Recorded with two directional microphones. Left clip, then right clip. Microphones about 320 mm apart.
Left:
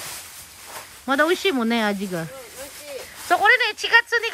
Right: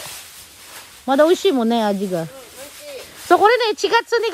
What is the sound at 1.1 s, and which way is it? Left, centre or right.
Speech, centre.